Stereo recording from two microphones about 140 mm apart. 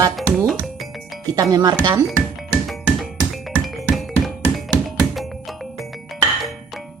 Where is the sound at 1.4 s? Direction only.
25° right (ahead or behind).